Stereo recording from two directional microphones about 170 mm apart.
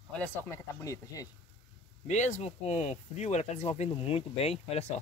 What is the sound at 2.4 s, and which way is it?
Speech, 40° left (ahead or behind).